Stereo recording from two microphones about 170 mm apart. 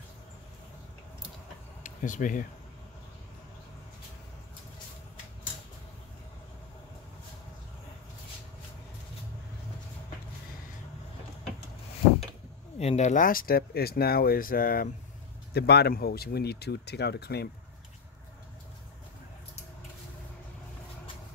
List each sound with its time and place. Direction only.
1.8 s speech: 50° left (ahead or behind)
12.7 s speech: 40° left (ahead or behind); by 14.9 s 55° left (ahead or behind)
15.5 s speech: 75° left (ahead or behind)